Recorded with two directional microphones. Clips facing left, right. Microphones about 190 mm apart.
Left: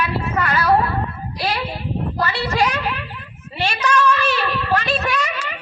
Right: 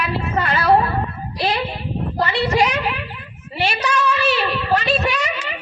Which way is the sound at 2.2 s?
25° right (ahead or behind).